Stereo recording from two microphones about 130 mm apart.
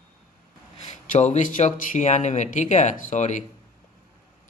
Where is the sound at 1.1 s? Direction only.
65° left (ahead or behind).